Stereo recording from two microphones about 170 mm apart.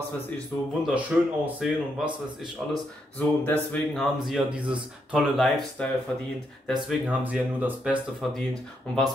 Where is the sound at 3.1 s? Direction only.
10° left (ahead or behind).